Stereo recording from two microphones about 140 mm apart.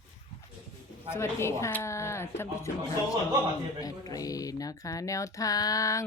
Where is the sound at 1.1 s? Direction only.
20° left (ahead or behind).